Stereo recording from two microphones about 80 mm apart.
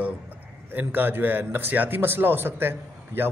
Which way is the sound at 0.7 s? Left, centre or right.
Right.